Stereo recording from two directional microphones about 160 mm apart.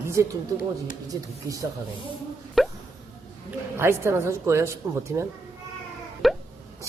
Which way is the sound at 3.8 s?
15° right (ahead or behind).